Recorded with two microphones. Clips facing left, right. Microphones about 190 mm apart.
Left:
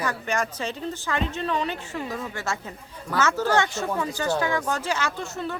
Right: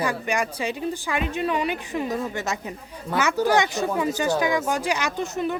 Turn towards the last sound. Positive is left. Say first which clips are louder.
# right 5 dB
turn(degrees=-15)  # may be behind; listen again after turning